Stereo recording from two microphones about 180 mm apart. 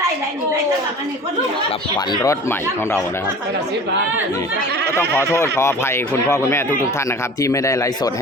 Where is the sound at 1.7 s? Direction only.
25° left (ahead or behind).